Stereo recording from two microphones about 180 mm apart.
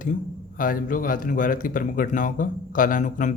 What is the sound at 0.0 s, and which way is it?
A man's voice, 50° left (ahead or behind).